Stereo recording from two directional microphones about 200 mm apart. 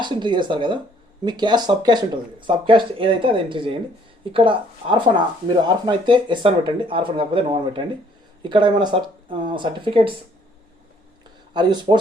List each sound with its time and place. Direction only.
0.0 s speech: 25° right (ahead or behind)
11.5 s speech: 20° right (ahead or behind)